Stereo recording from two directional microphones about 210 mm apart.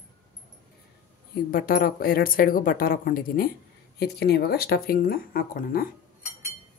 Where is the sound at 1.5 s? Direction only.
45° left (ahead or behind).